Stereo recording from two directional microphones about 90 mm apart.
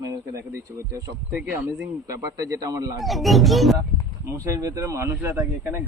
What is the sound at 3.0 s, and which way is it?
Speech, centre (ahead or behind).